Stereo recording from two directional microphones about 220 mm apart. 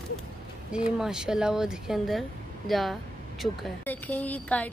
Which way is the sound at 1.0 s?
5° right (ahead or behind).